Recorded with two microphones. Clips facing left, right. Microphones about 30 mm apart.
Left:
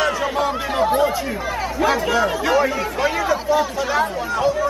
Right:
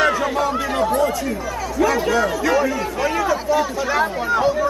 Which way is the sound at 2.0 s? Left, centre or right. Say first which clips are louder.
Even; centre.